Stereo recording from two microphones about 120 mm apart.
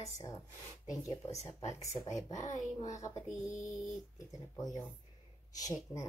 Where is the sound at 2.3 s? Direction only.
85° left.